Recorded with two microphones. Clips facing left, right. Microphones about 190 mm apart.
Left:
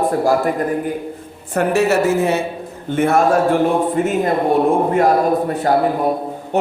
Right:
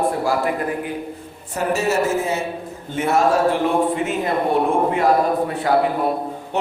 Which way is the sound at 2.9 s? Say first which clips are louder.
Left 3 dB; 55° left (ahead or behind).